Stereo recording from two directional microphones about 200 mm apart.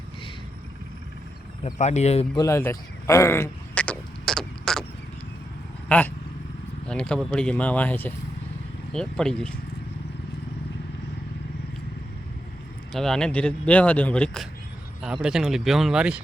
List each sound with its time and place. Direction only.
1.6 s speech: 35° left (ahead or behind)
2.4 s a sound: 10° left (ahead or behind)
5.9 s speech: 5° left (ahead or behind)
12.9 s speech: centre (ahead or behind)